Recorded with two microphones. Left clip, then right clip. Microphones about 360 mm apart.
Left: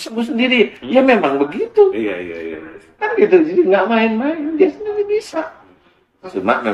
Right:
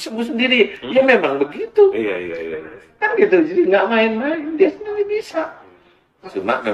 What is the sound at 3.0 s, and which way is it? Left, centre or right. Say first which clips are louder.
Speech: left 2 dB; centre.